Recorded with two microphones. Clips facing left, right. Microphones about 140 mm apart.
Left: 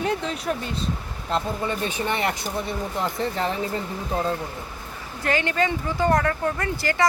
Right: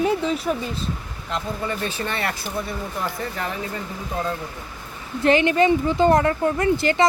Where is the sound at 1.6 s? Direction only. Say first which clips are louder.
Left 1 dB; 20° left (ahead or behind).